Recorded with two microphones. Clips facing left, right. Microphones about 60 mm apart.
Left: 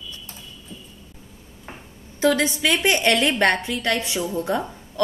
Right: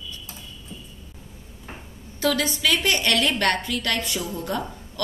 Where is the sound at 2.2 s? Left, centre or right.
Left.